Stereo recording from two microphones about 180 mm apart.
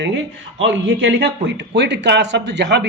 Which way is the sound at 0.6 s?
90° right.